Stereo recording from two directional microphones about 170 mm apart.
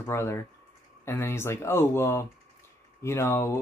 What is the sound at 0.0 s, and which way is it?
Speech, 15° left (ahead or behind).